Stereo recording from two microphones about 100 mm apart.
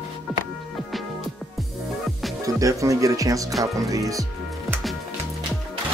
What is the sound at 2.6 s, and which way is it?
Speech, 35° right (ahead or behind).